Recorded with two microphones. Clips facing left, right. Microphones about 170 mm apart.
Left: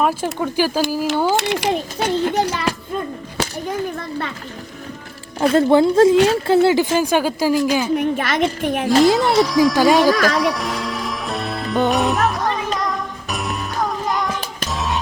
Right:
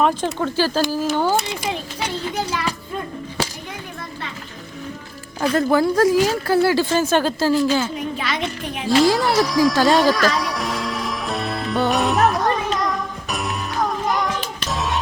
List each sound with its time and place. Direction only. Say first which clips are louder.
0.0 s speech: even; 10° left (ahead or behind)
1.4 s a child's voice: left 5 dB; 80° left
2.0 s a child's voice: left 9 dB; 50° left (ahead or behind); by 2.7 s 65° left (ahead or behind)
5.5 s speech: left 4 dB; 25° left (ahead or behind)
7.9 s a child's voice: left 6 dB; 55° left (ahead or behind)
9.1 s speech: left 3 dB; centre (ahead or behind)
9.9 s music: left 2 dB; centre (ahead or behind)